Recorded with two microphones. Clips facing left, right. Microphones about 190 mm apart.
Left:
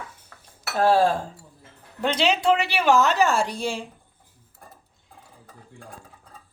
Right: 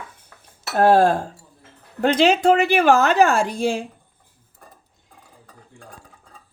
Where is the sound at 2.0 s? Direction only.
50° right (ahead or behind).